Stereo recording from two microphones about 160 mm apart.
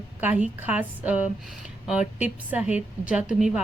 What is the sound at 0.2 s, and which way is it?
A woman's voice, 10° right (ahead or behind).